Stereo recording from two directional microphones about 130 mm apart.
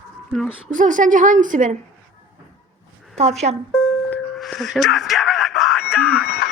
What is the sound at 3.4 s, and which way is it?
Speech, 70° right (ahead or behind).